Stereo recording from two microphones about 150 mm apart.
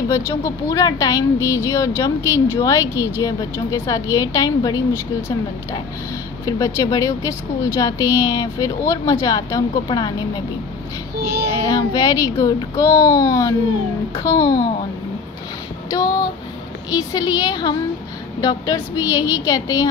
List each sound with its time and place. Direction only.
0.1 s a woman's voice: 20° left (ahead or behind)
6.4 s a woman's voice: 20° left (ahead or behind)
11.6 s a woman's voice: 25° left (ahead or behind)
15.9 s a woman's voice: 25° left (ahead or behind)